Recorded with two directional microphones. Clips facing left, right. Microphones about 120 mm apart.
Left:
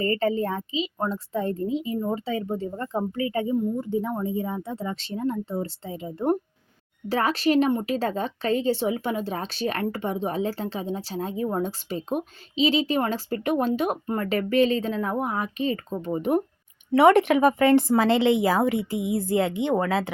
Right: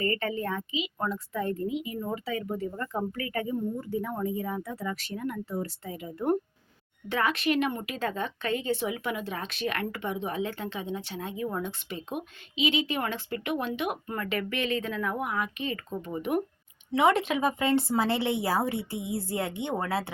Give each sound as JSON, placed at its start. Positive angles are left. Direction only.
{"t": 0.0, "sound": "a woman's voice", "side_deg": 30}
{"t": 16.9, "sound": "speech", "side_deg": 60}